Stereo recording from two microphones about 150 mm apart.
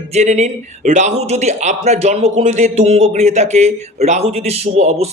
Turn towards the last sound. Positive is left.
turn(degrees=-45)  # may be behind; listen again after turning